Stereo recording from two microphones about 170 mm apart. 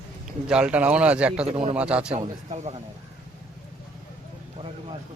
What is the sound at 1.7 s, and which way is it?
Speech, 10° right (ahead or behind).